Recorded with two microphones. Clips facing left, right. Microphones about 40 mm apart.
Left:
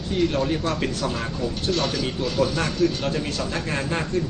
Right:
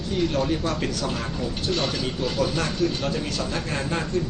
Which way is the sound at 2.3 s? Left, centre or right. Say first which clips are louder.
Left 3 dB; left.